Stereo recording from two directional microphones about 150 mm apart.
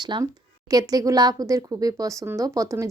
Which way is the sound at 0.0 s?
25° right (ahead or behind).